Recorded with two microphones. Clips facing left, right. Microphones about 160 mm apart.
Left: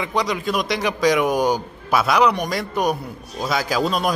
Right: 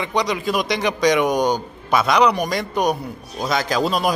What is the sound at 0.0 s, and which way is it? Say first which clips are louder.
A man's voice: right 1 dB; centre (ahead or behind).